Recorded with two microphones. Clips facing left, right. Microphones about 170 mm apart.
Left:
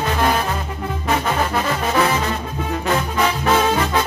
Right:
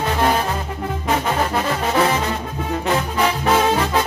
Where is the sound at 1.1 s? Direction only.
25° right (ahead or behind).